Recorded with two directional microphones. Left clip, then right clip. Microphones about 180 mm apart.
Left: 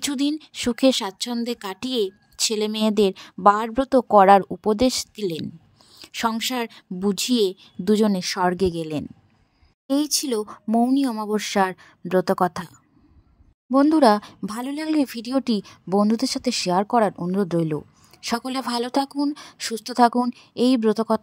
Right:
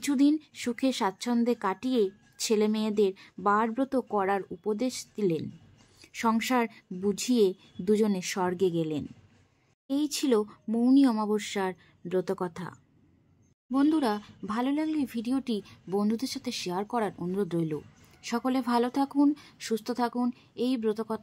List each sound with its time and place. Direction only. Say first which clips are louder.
0.0 s speech: left 1 dB; 40° left (ahead or behind)
13.7 s speech: left 10 dB; 40° left (ahead or behind)